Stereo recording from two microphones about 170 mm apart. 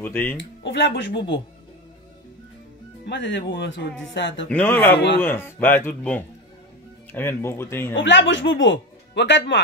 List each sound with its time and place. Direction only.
0.0 s speech: 15° left (ahead or behind)
0.4 s speech: 90° left
3.1 s speech: 90° left
4.5 s speech: 10° left (ahead or behind)
7.9 s speech: 90° left